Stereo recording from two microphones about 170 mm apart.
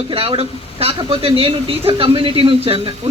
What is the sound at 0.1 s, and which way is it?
A man's voice, 35° right (ahead or behind).